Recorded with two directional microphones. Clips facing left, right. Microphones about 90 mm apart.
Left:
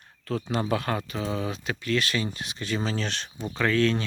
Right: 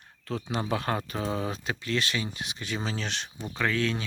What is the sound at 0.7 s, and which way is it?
Speech, 30° right (ahead or behind).